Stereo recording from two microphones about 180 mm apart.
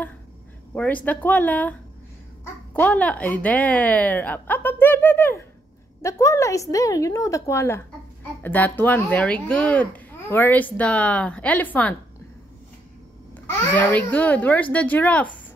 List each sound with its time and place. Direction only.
0.7 s a child's voice: 10° left (ahead or behind)
13.7 s speech: 10° left (ahead or behind)